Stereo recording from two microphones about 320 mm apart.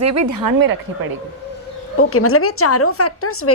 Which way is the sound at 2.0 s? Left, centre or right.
Left.